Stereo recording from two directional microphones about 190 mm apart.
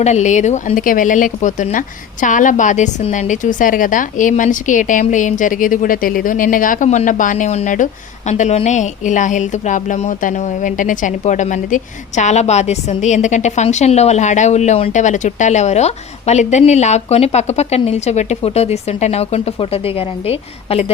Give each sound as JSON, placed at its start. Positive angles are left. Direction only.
{"t": 0.0, "sound": "a woman's voice", "side_deg": 40}